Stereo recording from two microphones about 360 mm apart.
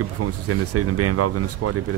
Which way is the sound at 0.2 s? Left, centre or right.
Right.